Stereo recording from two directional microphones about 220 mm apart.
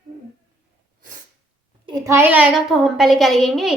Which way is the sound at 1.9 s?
10° right (ahead or behind).